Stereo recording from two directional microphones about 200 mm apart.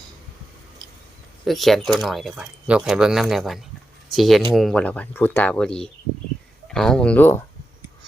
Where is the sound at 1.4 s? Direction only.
Centre (ahead or behind).